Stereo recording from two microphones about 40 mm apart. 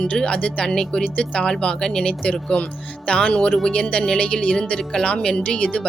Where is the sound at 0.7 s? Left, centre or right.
Centre.